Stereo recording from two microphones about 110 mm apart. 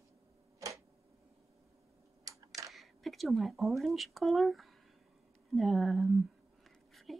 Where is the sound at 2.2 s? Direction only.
30° right (ahead or behind).